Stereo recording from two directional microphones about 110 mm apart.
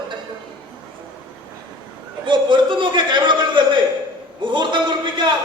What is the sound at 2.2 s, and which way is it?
A man's voice, 50° right (ahead or behind).